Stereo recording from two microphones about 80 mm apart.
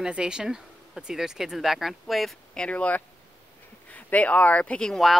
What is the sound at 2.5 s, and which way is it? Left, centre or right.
Speech, centre.